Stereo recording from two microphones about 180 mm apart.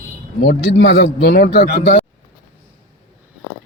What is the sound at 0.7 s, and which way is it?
A man's voice, 75° left (ahead or behind).